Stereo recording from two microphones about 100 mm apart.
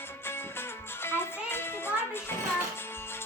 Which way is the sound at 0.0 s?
25° left (ahead or behind).